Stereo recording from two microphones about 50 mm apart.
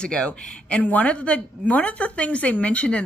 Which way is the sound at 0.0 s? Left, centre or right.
Left.